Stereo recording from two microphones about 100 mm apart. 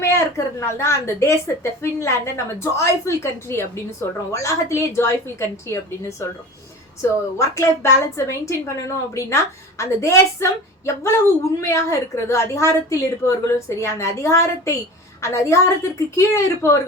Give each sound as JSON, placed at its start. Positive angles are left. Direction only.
{"t": 0.0, "sound": "a woman's voice", "side_deg": 25}